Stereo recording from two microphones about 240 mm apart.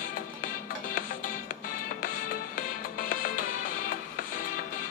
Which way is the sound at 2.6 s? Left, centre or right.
Left.